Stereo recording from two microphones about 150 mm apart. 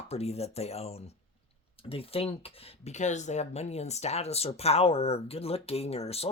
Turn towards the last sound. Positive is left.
turn(degrees=45)  # may be behind; listen again after turning